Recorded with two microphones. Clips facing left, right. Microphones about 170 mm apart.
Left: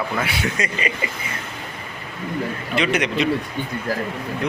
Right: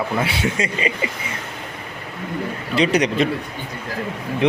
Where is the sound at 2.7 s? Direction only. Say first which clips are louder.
Right 4 dB; 35° right (ahead or behind).